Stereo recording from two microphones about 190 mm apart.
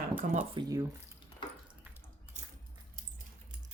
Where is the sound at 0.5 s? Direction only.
20° right (ahead or behind).